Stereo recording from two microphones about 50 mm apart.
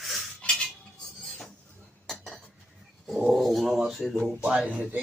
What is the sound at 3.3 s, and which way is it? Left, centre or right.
Speech, centre.